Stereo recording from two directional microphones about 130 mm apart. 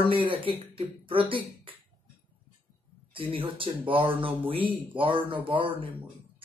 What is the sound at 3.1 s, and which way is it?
Speech, 40° right (ahead or behind).